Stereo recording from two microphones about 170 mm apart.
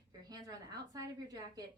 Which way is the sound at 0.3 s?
20° right (ahead or behind).